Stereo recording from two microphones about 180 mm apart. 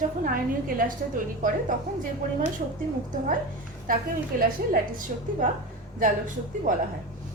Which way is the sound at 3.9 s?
50° right (ahead or behind).